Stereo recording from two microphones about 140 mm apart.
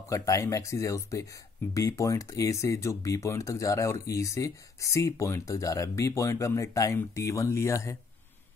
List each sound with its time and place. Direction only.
0.1 s speech: 25° left (ahead or behind)